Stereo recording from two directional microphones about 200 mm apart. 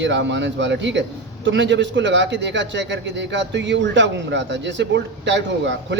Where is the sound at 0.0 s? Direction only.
60° right (ahead or behind).